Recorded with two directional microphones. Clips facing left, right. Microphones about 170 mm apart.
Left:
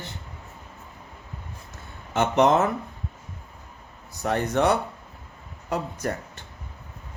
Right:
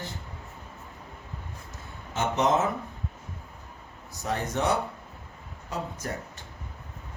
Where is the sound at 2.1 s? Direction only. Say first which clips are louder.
Left 5 dB; 65° left (ahead or behind).